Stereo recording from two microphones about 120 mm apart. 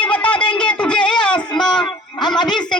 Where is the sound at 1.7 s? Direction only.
35° left (ahead or behind).